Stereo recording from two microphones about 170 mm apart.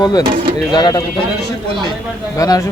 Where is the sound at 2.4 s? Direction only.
20° left (ahead or behind).